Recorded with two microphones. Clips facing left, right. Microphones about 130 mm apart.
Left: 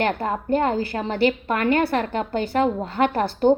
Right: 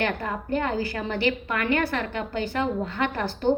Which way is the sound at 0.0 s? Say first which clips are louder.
Left 4 dB; 35° left (ahead or behind).